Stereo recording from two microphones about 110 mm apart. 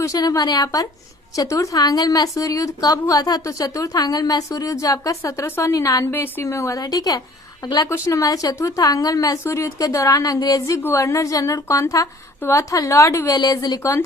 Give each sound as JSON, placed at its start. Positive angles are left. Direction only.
{"t": 0.0, "sound": "a woman's voice", "side_deg": 35}